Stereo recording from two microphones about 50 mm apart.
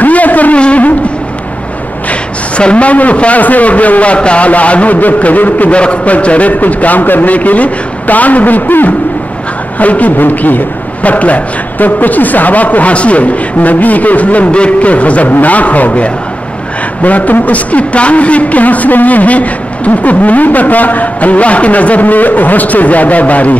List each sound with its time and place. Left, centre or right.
0.0 s a sound: left
0.6 s music: left
2.0 s a man's voice: left